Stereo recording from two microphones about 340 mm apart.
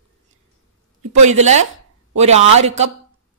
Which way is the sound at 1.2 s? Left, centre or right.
Centre.